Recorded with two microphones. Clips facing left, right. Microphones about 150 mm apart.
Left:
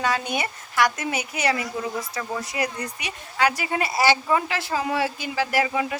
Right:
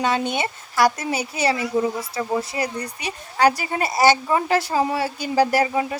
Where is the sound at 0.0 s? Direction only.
25° right (ahead or behind).